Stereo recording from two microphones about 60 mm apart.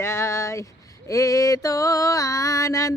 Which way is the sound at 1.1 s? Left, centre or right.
Left.